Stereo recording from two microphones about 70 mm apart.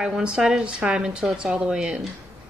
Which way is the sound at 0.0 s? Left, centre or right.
Centre.